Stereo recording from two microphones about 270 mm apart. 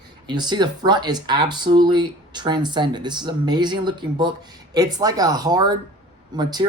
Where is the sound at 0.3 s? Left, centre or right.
Centre.